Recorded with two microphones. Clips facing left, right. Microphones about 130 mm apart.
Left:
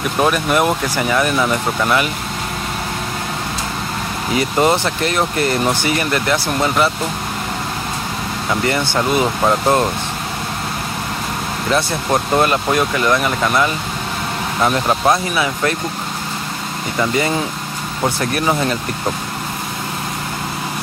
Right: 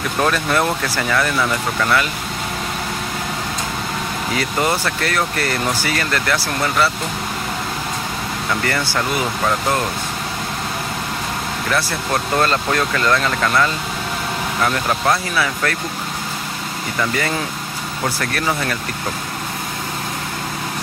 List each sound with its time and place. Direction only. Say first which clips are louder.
0.2 s speech: left 3 dB; 15° left (ahead or behind)
4.3 s speech: left 5 dB; 20° left (ahead or behind)
8.5 s speech: left 4 dB; 20° left (ahead or behind)
11.7 s speech: left 4 dB; 20° left (ahead or behind)
17.0 s speech: left 4 dB; 20° left (ahead or behind)